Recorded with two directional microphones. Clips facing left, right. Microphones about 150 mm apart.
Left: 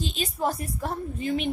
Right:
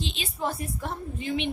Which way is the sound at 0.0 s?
45° left (ahead or behind).